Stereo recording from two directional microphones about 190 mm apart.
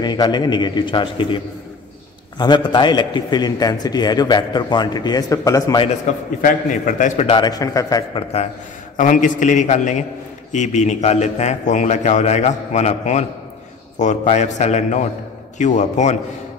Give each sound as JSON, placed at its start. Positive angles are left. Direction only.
{"t": 0.0, "sound": "a man's voice", "side_deg": 20}
{"t": 6.1, "sound": "a man's voice", "side_deg": 40}
{"t": 8.9, "sound": "a man's voice", "side_deg": 45}